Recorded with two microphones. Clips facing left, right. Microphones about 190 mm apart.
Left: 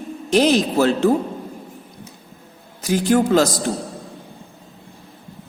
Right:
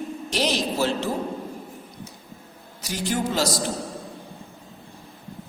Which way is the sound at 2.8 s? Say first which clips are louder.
Left 10 dB; 50° left (ahead or behind).